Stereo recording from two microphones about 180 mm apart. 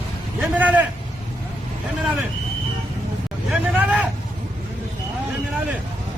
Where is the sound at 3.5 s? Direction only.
5° right (ahead or behind).